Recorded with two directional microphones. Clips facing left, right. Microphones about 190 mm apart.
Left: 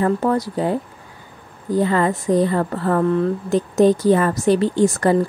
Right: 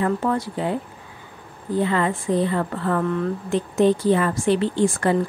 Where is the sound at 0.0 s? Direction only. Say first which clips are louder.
Left 4 dB; 40° left (ahead or behind).